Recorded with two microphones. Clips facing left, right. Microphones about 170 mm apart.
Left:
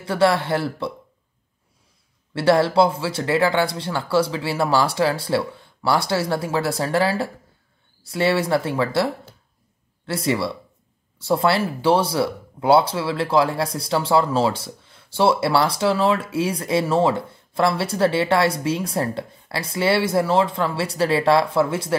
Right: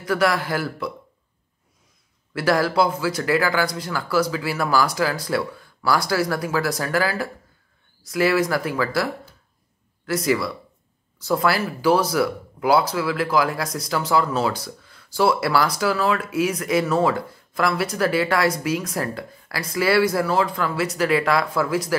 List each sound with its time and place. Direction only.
0.0 s speech: 25° left (ahead or behind)
2.3 s speech: 25° left (ahead or behind)